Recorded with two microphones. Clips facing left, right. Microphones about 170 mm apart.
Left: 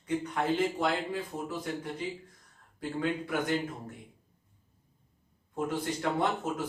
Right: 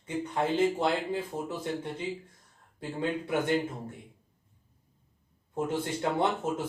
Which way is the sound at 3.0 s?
25° right (ahead or behind).